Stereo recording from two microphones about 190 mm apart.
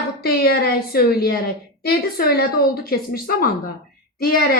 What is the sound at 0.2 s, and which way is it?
A woman's voice, 55° left (ahead or behind).